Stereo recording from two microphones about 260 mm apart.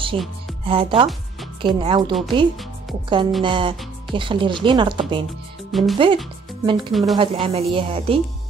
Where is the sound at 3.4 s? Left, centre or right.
Centre.